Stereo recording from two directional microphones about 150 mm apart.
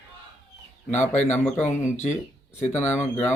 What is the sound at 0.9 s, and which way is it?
Speech, 50° left (ahead or behind).